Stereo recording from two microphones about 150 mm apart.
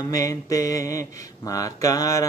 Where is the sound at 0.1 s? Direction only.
20° left (ahead or behind).